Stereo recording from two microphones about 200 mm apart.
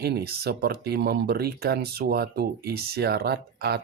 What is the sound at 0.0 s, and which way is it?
Speech, 50° right (ahead or behind).